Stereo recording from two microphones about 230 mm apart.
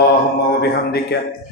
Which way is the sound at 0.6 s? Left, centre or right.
Left.